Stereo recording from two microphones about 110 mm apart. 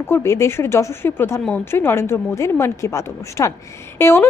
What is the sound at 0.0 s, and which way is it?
Speech, 25° left (ahead or behind).